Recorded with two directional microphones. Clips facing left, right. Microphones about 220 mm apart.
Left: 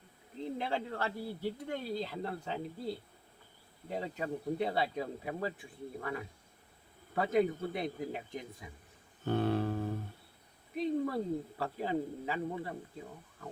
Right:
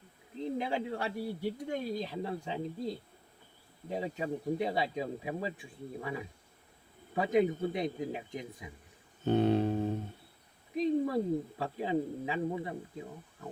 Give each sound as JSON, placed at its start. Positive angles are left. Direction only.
{"t": 0.6, "sound": "speech", "side_deg": -15}
{"t": 9.2, "sound": "mantra", "side_deg": -20}
{"t": 10.8, "sound": "speech", "side_deg": -15}